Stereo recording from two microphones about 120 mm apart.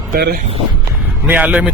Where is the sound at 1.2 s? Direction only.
10° right (ahead or behind).